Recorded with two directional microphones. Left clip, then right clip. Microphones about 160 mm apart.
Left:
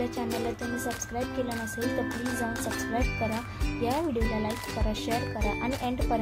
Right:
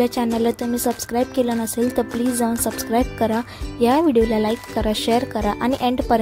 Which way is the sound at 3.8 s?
65° right (ahead or behind).